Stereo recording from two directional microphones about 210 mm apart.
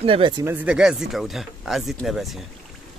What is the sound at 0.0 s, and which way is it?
Speech, 25° right (ahead or behind).